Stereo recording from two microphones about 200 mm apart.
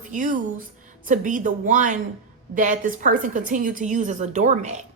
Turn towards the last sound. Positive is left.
turn(degrees=-35)  # may be behind; listen again after turning